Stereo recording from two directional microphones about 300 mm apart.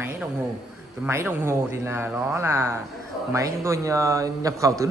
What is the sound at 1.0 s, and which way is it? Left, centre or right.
A man's voice, centre.